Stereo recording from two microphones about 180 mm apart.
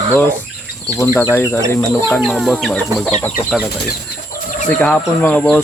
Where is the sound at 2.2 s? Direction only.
Centre (ahead or behind).